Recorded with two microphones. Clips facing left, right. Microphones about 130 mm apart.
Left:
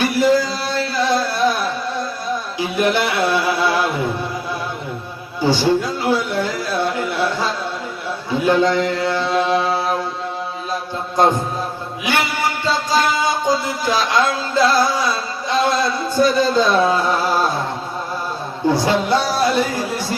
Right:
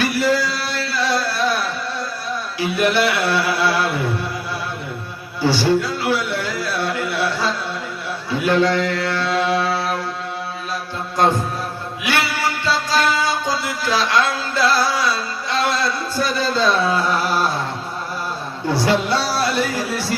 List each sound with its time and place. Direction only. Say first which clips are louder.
0.0 s music: left 3 dB; 15° left (ahead or behind)
2.6 s speech: right 1 dB; 15° left (ahead or behind)
5.4 s music: left 1 dB; 15° left (ahead or behind)
8.3 s mantra: left 1 dB; 15° left (ahead or behind)
12.0 s music: left 1 dB; 20° left (ahead or behind)
18.7 s speech: left 1 dB; 15° left (ahead or behind)